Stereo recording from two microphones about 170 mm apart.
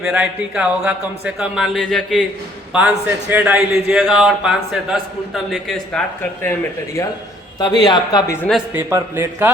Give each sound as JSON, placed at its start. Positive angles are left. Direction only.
{"t": 0.0, "sound": "speech", "side_deg": -5}
{"t": 7.6, "sound": "speech", "side_deg": 25}
{"t": 8.4, "sound": "speech", "side_deg": 0}
{"t": 8.7, "sound": "speech", "side_deg": -15}